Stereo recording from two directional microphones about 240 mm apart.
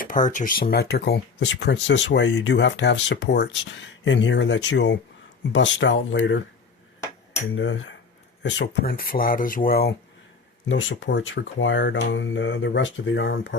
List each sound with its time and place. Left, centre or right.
0.0 s speech: left
7.5 s speech: left
10.7 s speech: left